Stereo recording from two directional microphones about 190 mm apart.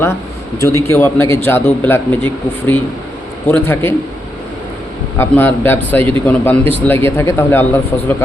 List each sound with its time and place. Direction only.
0.6 s speech: 15° left (ahead or behind)
5.1 s speech: 10° left (ahead or behind)